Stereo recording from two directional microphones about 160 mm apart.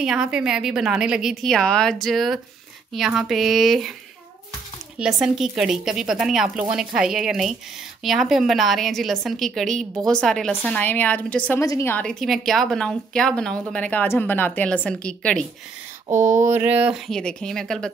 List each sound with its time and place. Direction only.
0.0 s a woman's voice: 5° right (ahead or behind)
4.9 s a woman's voice: 5° right (ahead or behind)
16.1 s speech: 15° right (ahead or behind)
17.1 s a woman's voice: 5° left (ahead or behind)